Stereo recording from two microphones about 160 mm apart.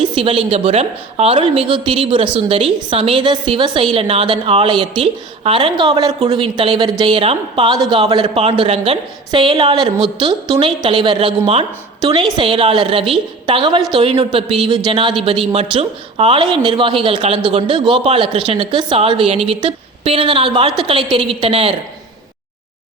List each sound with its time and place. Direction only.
0.2 s a woman's voice: 35° right (ahead or behind)